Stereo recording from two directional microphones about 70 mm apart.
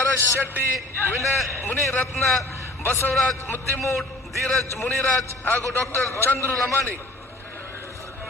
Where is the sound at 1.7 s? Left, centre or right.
Left.